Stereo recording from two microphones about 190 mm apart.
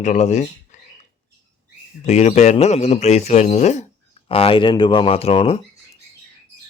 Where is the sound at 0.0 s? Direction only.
40° left (ahead or behind).